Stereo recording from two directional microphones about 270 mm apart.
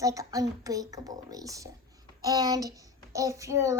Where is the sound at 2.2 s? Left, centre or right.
Centre.